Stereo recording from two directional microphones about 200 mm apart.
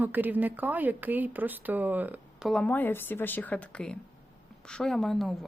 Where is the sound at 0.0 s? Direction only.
10° right (ahead or behind).